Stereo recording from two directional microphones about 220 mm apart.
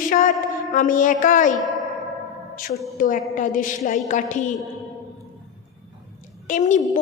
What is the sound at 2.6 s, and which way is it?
Speech, 40° left (ahead or behind).